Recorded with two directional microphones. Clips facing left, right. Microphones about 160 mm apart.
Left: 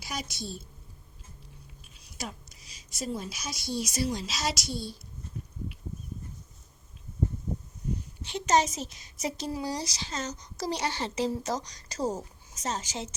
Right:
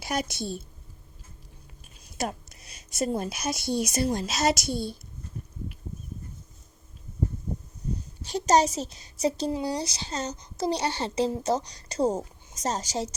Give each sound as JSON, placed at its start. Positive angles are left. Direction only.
{"t": 0.0, "sound": "speech", "side_deg": -55}
{"t": 2.1, "sound": "speech", "side_deg": -55}
{"t": 8.2, "sound": "a woman's voice", "side_deg": -40}